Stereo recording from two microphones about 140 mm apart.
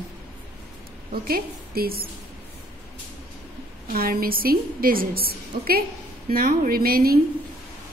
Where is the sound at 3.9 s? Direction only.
90° right.